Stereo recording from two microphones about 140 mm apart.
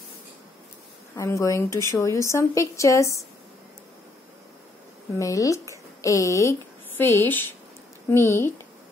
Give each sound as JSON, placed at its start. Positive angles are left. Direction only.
{"t": 1.1, "sound": "a woman's voice", "side_deg": 20}
{"t": 5.2, "sound": "a woman's voice", "side_deg": 25}